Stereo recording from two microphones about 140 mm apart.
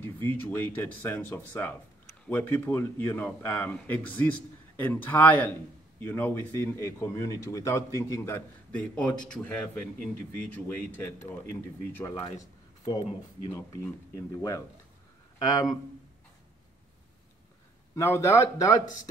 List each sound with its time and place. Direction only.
0.0 s speech: 15° left (ahead or behind)
8.7 s speech: 10° left (ahead or behind)
12.1 s speech: 35° left (ahead or behind)
13.4 s speech: 25° left (ahead or behind)
17.9 s speech: 20° left (ahead or behind)